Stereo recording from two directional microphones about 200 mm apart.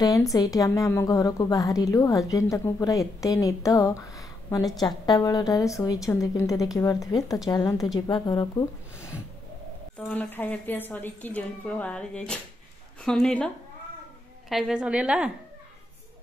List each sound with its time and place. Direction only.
0.0 s a woman's voice: 15° left (ahead or behind)
14.5 s a woman's voice: centre (ahead or behind)